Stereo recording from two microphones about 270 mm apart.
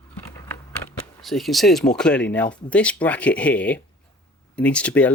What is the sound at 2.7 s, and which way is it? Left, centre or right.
Speech, centre.